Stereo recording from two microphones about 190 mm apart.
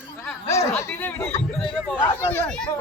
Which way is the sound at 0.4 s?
15° left (ahead or behind).